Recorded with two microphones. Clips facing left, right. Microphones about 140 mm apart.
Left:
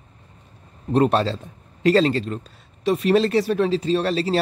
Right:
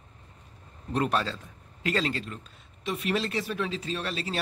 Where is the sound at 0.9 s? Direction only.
30° left (ahead or behind).